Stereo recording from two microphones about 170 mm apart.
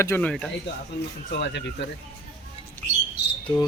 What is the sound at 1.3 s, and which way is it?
Speech, 90° left.